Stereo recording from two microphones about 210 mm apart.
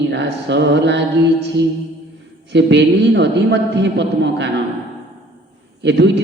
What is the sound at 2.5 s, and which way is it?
Mantra, 55° right (ahead or behind).